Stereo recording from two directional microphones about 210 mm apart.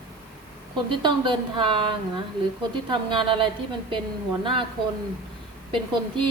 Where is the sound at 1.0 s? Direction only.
25° right (ahead or behind).